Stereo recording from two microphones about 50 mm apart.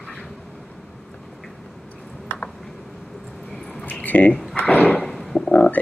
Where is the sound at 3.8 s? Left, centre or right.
Left.